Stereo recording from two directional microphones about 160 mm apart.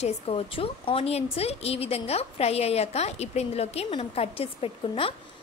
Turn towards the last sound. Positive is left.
turn(degrees=35)  # may be behind; listen again after turning